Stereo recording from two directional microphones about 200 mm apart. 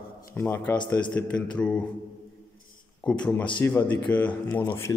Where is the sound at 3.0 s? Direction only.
5° left (ahead or behind).